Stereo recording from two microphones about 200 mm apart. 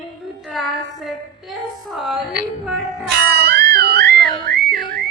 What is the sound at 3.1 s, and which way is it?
Music, 55° right (ahead or behind).